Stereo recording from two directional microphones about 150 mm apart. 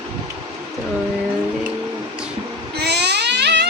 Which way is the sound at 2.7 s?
90° right.